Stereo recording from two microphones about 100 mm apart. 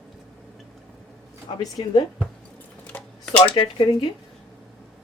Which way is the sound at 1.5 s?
40° left (ahead or behind).